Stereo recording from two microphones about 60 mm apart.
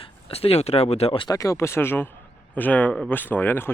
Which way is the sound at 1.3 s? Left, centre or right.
Left.